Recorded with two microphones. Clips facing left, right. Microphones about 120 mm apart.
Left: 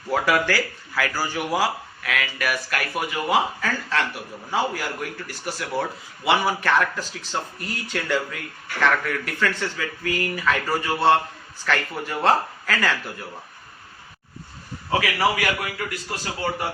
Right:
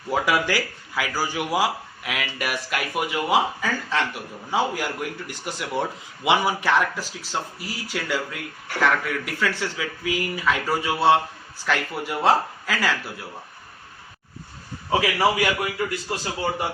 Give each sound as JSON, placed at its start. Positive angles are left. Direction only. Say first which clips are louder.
{"t": 0.1, "sound": "a man's voice", "louder": "left 1 dB", "side_deg": -10}
{"t": 14.8, "sound": "a man's voice", "louder": "right 1 dB", "side_deg": -25}